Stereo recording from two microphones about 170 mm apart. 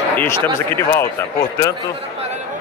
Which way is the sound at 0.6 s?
15° left (ahead or behind).